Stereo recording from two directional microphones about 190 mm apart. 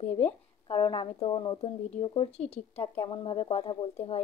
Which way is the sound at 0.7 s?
25° left (ahead or behind).